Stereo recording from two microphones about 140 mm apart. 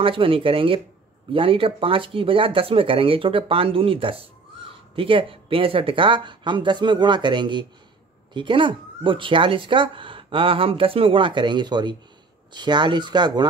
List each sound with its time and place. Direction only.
0.0 s speech: 40° right (ahead or behind)